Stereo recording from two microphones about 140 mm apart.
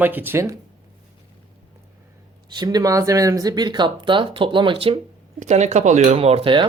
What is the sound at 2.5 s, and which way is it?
Speech, 30° right (ahead or behind).